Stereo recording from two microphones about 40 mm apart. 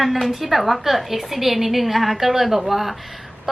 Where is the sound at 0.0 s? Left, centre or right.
Centre.